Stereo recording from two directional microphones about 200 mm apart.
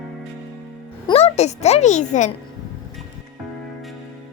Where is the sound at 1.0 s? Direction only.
30° left (ahead or behind).